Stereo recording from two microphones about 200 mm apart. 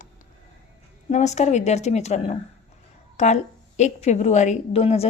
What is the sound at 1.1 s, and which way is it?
A woman's voice, 35° left (ahead or behind).